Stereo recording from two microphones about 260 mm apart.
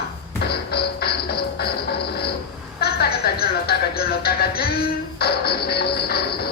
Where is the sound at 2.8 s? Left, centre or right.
Left.